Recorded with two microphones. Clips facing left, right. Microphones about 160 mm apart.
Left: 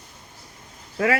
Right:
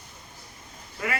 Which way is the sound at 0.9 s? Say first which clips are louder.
Left 9 dB; 90° left.